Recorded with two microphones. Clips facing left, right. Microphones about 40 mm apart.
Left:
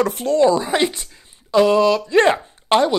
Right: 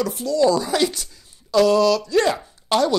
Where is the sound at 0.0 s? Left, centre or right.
Left.